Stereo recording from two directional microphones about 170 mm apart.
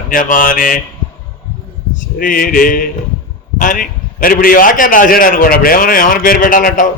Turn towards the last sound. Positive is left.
turn(degrees=55)  # may be behind; listen again after turning